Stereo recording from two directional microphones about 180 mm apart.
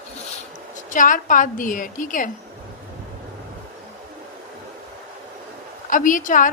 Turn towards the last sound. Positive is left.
turn(degrees=45)  # may be behind; listen again after turning